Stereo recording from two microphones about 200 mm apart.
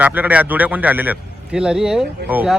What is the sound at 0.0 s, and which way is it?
A man's voice, 10° right (ahead or behind).